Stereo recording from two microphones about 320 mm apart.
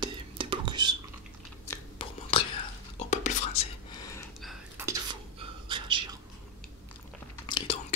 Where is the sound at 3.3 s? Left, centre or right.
Left.